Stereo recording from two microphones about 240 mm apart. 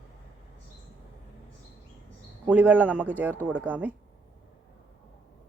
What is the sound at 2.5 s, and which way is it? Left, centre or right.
A man's voice, centre.